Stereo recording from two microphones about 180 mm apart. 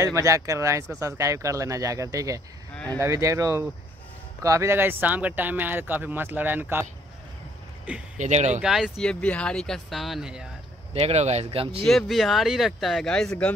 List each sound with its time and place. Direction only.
0.0 s speech: 15° right (ahead or behind)
2.7 s speech: 5° left (ahead or behind)
3.0 s speech: 15° right (ahead or behind)
8.2 s speech: 40° right (ahead or behind)
8.5 s speech: centre (ahead or behind)
10.9 s speech: 35° right (ahead or behind)
11.8 s speech: centre (ahead or behind)